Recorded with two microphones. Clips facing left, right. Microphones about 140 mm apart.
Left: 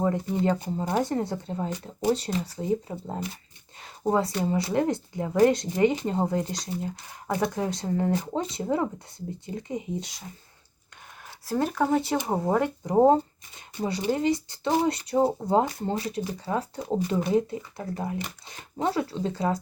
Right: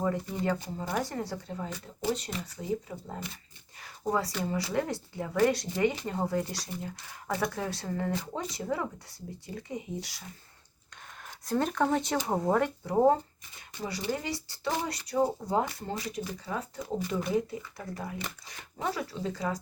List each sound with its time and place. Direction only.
0.0 s speech: 25° left (ahead or behind)
11.4 s speech: 5° left (ahead or behind); by 19.5 s 30° left (ahead or behind)